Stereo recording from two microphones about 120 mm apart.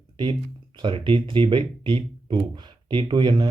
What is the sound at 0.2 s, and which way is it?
Speech, 35° right (ahead or behind).